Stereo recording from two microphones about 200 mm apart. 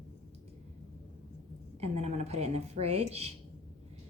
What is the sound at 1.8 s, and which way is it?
A woman's voice, 30° right (ahead or behind).